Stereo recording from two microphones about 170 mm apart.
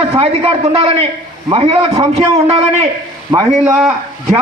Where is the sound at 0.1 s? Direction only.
35° right (ahead or behind).